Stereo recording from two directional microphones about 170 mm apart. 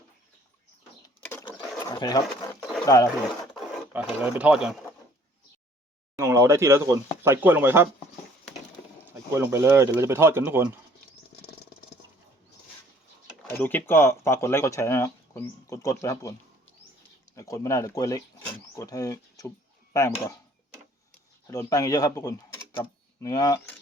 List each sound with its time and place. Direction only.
1.5 s wild animals: 25° left (ahead or behind)
2.8 s speech: 20° left (ahead or behind)
3.9 s speech: 10° right (ahead or behind)
6.1 s speech: 15° right (ahead or behind)
9.0 s speech: 15° right (ahead or behind)
13.5 s speech: 10° left (ahead or behind)
17.3 s speech: 20° left (ahead or behind)
21.4 s speech: 20° left (ahead or behind)